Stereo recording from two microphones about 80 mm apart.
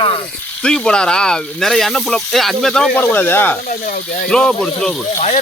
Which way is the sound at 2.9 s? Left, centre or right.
Left.